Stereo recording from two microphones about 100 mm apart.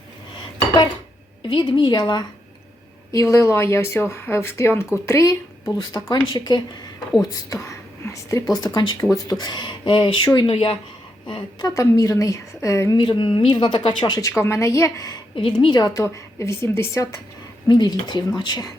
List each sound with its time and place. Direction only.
1.5 s speech: 50° left (ahead or behind)
3.1 s a woman's voice: 30° left (ahead or behind)
8.6 s speech: 50° left (ahead or behind)
10.5 s speech: 65° left (ahead or behind)
11.3 s speech: 55° left (ahead or behind)
11.7 s a woman's voice: 35° left (ahead or behind)
13.0 s speech: 55° left (ahead or behind)
14.2 s speech: 30° left (ahead or behind)
15.4 s speech: 55° left (ahead or behind)
16.0 s speech: 30° left (ahead or behind)
17.7 s speech: 45° left (ahead or behind)